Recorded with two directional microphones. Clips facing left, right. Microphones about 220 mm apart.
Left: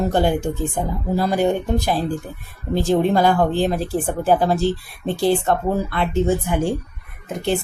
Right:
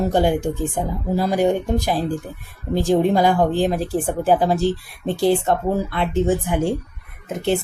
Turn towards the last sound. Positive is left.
turn(degrees=-20)  # may be behind; listen again after turning